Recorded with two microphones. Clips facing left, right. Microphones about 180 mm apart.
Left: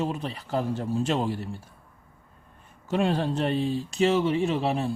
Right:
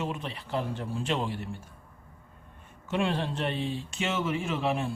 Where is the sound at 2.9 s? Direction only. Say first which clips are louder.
Left 4 dB; 40° left (ahead or behind).